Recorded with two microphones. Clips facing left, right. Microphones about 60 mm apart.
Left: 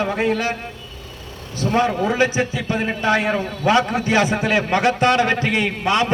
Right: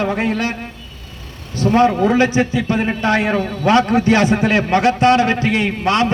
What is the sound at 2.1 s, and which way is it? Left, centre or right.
Speech, centre.